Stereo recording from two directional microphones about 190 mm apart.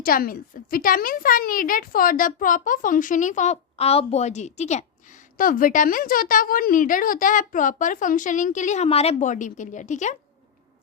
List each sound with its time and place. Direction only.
0.0 s speech: 50° left (ahead or behind)